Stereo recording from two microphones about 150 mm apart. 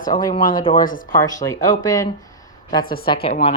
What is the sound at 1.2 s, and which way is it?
Speech, 20° left (ahead or behind).